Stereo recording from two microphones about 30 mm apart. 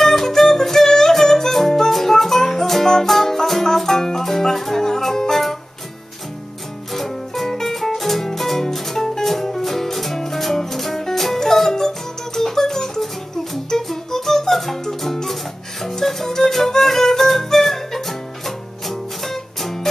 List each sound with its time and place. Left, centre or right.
0.0 s music: centre
6.9 s music: centre